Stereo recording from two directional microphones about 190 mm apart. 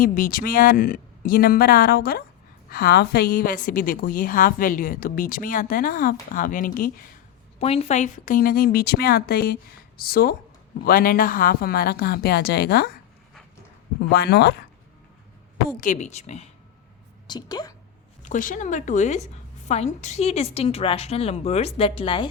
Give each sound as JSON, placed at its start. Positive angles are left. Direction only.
{"t": 0.0, "sound": "a woman's voice", "side_deg": 50}
{"t": 7.6, "sound": "a woman's voice", "side_deg": 30}
{"t": 14.1, "sound": "speech", "side_deg": 55}
{"t": 15.8, "sound": "a woman's voice", "side_deg": 40}
{"t": 17.2, "sound": "a woman's voice", "side_deg": 20}
{"t": 18.2, "sound": "a woman's voice", "side_deg": 40}